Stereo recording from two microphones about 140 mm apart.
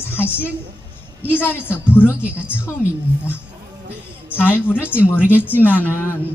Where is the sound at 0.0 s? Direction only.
15° left (ahead or behind).